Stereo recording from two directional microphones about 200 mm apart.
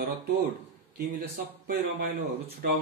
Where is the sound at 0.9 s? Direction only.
45° right (ahead or behind).